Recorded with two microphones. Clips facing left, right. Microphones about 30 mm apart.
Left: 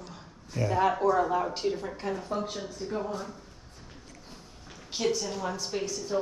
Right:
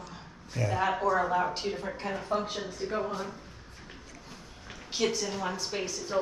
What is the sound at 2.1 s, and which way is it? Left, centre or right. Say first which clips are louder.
A woman's voice: right 1 dB; right.